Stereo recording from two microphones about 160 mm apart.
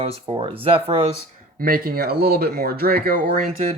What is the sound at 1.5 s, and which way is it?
Speech, 65° right (ahead or behind).